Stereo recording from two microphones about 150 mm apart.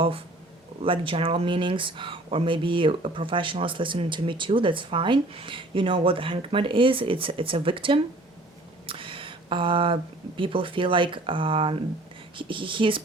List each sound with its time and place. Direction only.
0.8 s speech: 35° right (ahead or behind)